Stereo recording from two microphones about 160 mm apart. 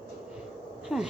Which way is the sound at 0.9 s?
5° right (ahead or behind).